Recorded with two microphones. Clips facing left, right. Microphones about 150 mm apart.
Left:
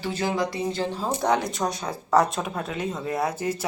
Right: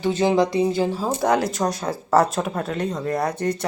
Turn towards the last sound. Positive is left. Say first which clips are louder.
# right 3 dB
turn(degrees=5)  # may be behind; listen again after turning